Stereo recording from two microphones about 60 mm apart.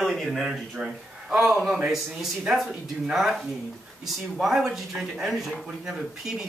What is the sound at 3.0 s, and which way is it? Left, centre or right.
Speech, centre.